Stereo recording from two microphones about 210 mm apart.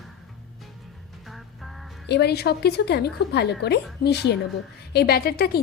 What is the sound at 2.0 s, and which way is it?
A woman's voice, 50° left (ahead or behind).